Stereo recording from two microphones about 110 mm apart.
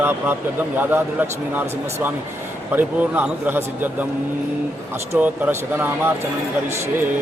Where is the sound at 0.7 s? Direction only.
15° right (ahead or behind).